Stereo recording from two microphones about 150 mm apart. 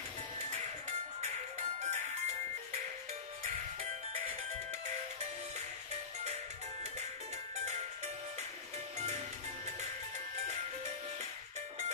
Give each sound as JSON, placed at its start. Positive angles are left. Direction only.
{"t": 0.5, "sound": "music", "side_deg": -50}